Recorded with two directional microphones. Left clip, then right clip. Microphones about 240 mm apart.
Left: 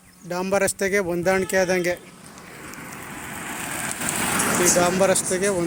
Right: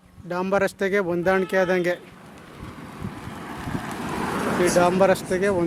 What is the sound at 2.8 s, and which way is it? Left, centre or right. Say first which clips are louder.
Vehicle: left 2 dB; centre.